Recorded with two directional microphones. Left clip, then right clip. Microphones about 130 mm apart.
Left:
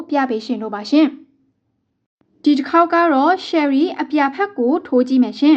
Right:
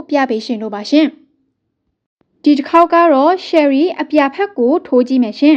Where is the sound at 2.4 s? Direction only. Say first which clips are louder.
Right 4 dB; 30° right (ahead or behind).